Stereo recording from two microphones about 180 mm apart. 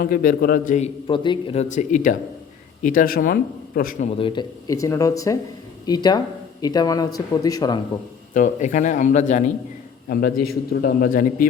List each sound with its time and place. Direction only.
0.0 s speech: 55° left (ahead or behind)
0.8 s speech: 30° left (ahead or behind)
1.6 s speech: 45° left (ahead or behind)
4.2 s speech: 25° left (ahead or behind)
8.3 s speech: 45° left (ahead or behind)
10.1 s a man's voice: 55° left (ahead or behind)